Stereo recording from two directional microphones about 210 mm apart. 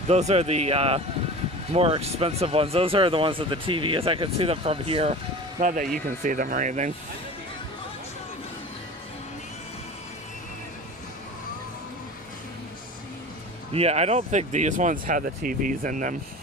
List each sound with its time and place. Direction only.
0.1 s speech: 30° right (ahead or behind)
5.6 s speech: 40° right (ahead or behind)
13.7 s speech: 30° right (ahead or behind)